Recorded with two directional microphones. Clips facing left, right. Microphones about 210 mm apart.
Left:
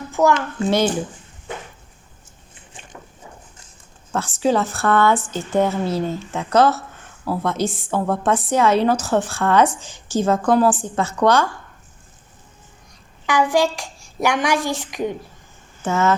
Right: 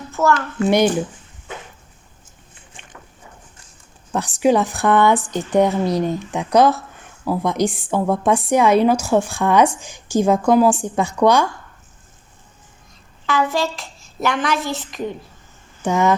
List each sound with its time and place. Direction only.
0.2 s a child's voice: 15° left (ahead or behind)
4.4 s speech: 15° right (ahead or behind)
13.2 s a child's voice: 15° left (ahead or behind)
15.8 s speech: 15° right (ahead or behind)